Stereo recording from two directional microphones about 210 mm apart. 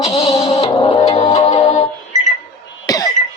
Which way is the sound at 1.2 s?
20° left (ahead or behind).